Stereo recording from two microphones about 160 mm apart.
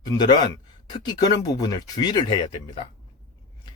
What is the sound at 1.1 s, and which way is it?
Speech, 25° left (ahead or behind).